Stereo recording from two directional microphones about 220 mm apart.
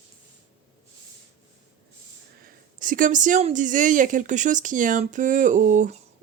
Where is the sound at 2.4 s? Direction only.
40° right (ahead or behind).